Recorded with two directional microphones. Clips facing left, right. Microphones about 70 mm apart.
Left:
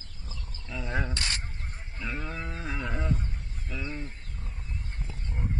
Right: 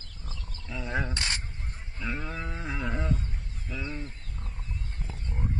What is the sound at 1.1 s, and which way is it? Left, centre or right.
Speech, right.